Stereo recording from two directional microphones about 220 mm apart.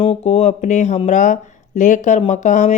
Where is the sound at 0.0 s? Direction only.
25° left (ahead or behind).